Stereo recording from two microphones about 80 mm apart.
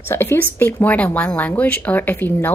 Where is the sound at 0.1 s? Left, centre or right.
Left.